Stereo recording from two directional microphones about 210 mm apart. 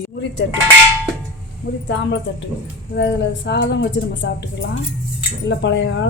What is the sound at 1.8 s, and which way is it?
Speech, 60° left (ahead or behind).